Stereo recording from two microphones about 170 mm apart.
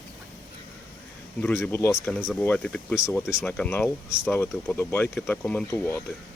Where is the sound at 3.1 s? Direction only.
15° left (ahead or behind).